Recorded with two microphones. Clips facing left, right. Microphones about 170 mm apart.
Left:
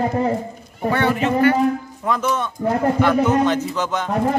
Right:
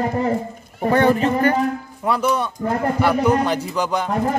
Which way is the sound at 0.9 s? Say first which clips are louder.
Right 3 dB; 35° right (ahead or behind).